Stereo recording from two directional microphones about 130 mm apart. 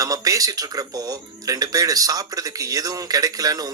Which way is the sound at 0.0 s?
25° right (ahead or behind).